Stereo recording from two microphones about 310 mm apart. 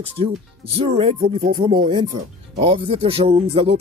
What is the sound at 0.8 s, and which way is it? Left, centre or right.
Speech, centre.